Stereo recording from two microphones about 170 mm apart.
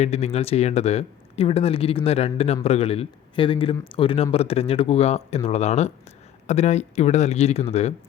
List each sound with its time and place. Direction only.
0.0 s speech: 40° left (ahead or behind)